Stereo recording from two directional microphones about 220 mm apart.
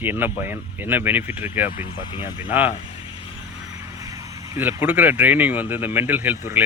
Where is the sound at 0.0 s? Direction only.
10° right (ahead or behind).